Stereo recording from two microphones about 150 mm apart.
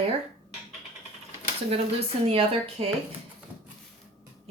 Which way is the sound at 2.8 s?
40° right (ahead or behind).